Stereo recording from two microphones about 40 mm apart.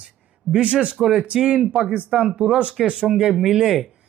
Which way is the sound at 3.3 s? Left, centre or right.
Centre.